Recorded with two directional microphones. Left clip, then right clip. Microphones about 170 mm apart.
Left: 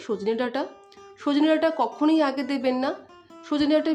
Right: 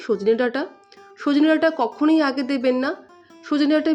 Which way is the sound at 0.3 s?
20° right (ahead or behind).